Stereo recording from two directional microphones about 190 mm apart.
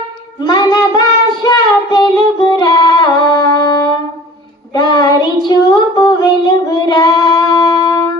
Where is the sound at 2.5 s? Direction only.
25° left (ahead or behind).